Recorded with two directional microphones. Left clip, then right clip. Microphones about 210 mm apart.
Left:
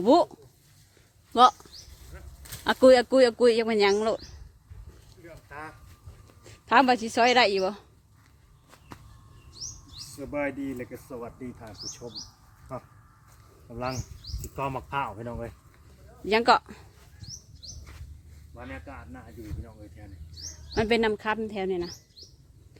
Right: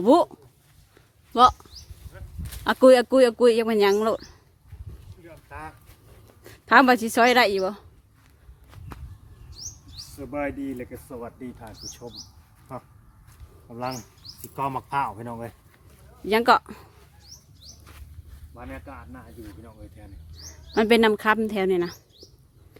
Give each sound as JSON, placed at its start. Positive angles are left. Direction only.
{"t": 0.0, "sound": "speech", "side_deg": -10}
{"t": 1.3, "sound": "speech", "side_deg": -5}
{"t": 2.6, "sound": "speech", "side_deg": -10}
{"t": 5.2, "sound": "a sound", "side_deg": -5}
{"t": 6.4, "sound": "a woman's voice", "side_deg": -15}
{"t": 10.2, "sound": "speech", "side_deg": 0}
{"t": 16.2, "sound": "speech", "side_deg": -10}
{"t": 18.5, "sound": "speech", "side_deg": -10}
{"t": 20.4, "sound": "speech", "side_deg": -25}